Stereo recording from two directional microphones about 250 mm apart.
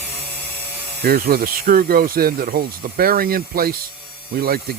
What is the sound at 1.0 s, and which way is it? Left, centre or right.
Speech, right.